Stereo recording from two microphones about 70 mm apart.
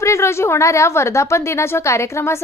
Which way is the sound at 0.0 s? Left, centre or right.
Left.